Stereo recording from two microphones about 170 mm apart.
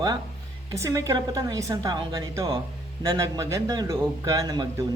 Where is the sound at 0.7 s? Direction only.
20° right (ahead or behind).